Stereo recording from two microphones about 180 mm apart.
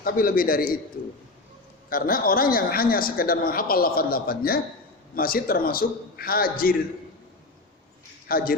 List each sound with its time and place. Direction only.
0.0 s a man's voice: 55° left (ahead or behind)
1.9 s a man's voice: 50° left (ahead or behind)
8.3 s a man's voice: 55° left (ahead or behind)